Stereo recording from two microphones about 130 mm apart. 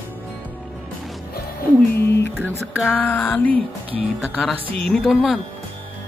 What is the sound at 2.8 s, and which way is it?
Music, 15° left (ahead or behind).